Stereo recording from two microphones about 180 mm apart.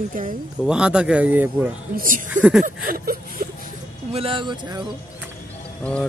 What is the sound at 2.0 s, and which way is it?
Speech, 50° right (ahead or behind).